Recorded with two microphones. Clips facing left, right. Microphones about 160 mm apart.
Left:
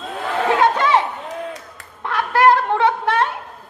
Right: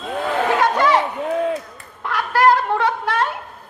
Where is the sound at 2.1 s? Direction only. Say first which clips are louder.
Left 1 dB; 25° left (ahead or behind).